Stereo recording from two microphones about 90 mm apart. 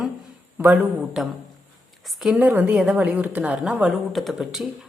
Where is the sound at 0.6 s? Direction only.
20° right (ahead or behind).